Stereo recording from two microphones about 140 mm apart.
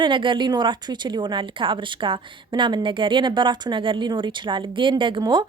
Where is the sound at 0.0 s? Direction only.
35° right (ahead or behind).